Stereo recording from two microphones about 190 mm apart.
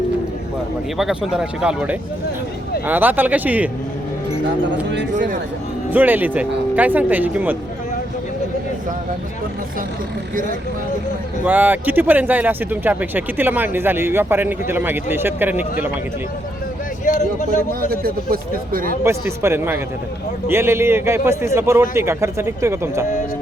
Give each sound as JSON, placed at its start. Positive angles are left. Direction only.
{"t": 0.9, "sound": "speech", "side_deg": 0}
{"t": 5.1, "sound": "speech", "side_deg": -45}
{"t": 5.9, "sound": "speech", "side_deg": -10}
{"t": 11.4, "sound": "speech", "side_deg": -10}
{"t": 17.1, "sound": "speech", "side_deg": 40}
{"t": 17.7, "sound": "speech", "side_deg": -50}
{"t": 19.0, "sound": "speech", "side_deg": -15}